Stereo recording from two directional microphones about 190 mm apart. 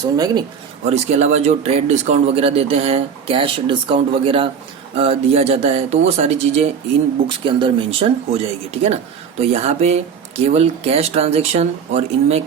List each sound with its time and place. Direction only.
0.0 s speech: 20° right (ahead or behind)
0.9 s speech: 35° right (ahead or behind)